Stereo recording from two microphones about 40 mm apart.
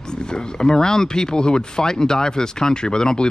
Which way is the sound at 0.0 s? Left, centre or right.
Centre.